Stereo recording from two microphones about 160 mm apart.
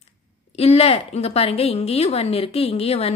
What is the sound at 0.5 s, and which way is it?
A woman's voice, 40° left (ahead or behind).